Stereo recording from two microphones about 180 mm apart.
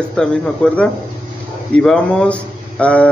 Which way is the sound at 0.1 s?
5° left (ahead or behind).